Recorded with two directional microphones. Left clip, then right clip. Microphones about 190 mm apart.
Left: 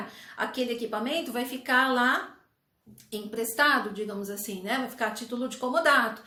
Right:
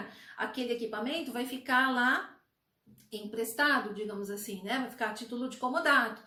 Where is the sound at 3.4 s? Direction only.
20° left (ahead or behind).